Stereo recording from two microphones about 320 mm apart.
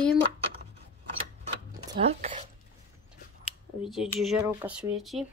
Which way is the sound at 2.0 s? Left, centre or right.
Right.